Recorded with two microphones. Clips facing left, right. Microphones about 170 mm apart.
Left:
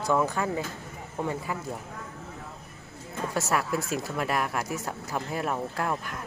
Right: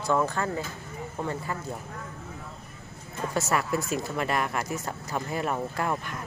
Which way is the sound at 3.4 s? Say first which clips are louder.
Right 1 dB; centre (ahead or behind).